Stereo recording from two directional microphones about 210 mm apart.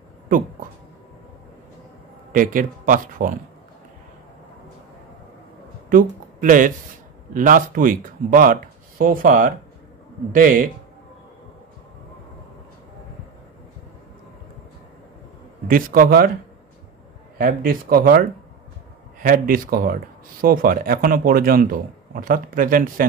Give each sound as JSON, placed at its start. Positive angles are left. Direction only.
{"t": 2.3, "sound": "speech", "side_deg": -40}
{"t": 5.9, "sound": "speech", "side_deg": -40}
{"t": 15.7, "sound": "speech", "side_deg": -45}
{"t": 17.4, "sound": "speech", "side_deg": -45}
{"t": 19.2, "sound": "speech", "side_deg": -45}